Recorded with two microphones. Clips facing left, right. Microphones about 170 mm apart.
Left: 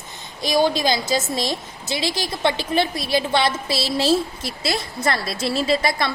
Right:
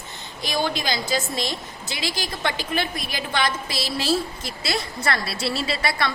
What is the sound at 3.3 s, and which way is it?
Speech, 25° left (ahead or behind).